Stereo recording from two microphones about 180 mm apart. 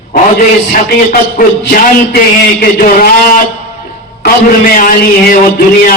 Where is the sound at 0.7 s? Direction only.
50° left (ahead or behind).